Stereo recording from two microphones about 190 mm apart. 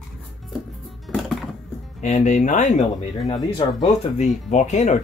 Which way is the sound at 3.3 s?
25° left (ahead or behind).